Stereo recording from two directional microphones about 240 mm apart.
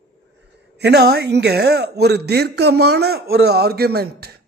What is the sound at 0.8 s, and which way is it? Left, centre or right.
A man's voice, right.